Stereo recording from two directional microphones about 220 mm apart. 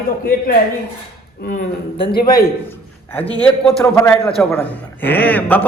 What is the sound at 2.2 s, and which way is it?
Speech, 40° left (ahead or behind).